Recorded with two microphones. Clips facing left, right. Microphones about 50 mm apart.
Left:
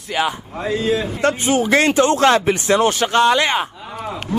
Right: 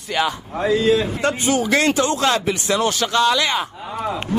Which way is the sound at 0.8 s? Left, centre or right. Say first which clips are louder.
Right 1 dB; right.